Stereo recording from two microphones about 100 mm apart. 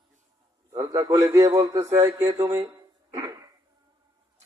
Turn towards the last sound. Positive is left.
turn(degrees=-30)  # may be behind; listen again after turning